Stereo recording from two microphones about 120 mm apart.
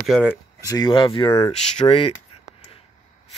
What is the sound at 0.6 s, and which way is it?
Speech, 30° left (ahead or behind).